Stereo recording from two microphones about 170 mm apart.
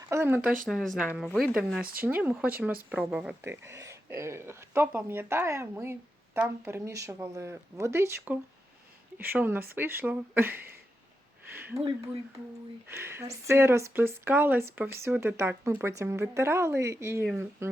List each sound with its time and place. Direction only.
0.1 s speech: 15° right (ahead or behind)
0.7 s a woman's voice: centre (ahead or behind)
1.8 s speech: 60° right (ahead or behind)
2.0 s a woman's voice: 10° right (ahead or behind)
3.4 s speech: 15° right (ahead or behind)
11.5 s a sound: 15° right (ahead or behind)
12.9 s speech: 15° right (ahead or behind)